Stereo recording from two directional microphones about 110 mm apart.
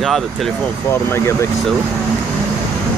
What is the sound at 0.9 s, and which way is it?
Speech, 25° left (ahead or behind).